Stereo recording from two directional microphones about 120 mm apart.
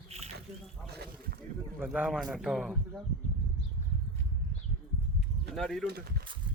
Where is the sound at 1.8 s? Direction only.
10° right (ahead or behind).